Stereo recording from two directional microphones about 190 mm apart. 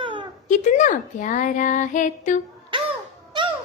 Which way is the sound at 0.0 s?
25° right (ahead or behind).